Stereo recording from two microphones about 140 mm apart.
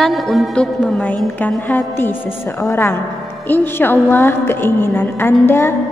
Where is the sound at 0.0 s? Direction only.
Centre (ahead or behind).